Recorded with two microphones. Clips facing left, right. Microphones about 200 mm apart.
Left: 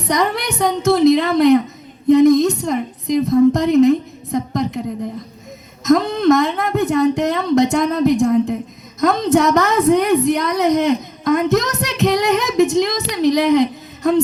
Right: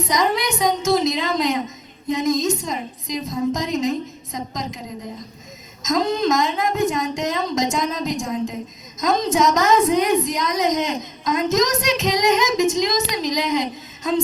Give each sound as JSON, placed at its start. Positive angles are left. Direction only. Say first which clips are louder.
{"t": 0.0, "sound": "a woman's voice", "louder": "left 2 dB", "side_deg": 60}
{"t": 5.8, "sound": "a woman's voice", "louder": "left 6 dB", "side_deg": 60}